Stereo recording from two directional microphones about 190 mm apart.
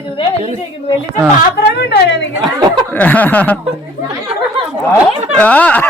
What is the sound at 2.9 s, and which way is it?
Speech, 10° left (ahead or behind).